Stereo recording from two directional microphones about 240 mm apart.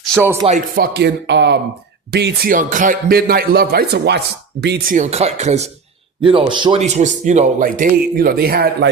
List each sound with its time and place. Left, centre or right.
0.0 s a sound: centre
0.4 s a man's voice: right
0.9 s a man's voice: right
4.9 s a man's voice: right